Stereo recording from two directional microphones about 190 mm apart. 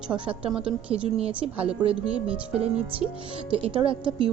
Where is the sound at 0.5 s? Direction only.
5° right (ahead or behind).